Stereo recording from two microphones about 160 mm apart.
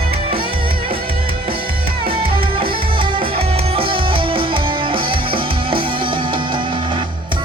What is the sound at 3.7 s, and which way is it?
Music, 35° right (ahead or behind).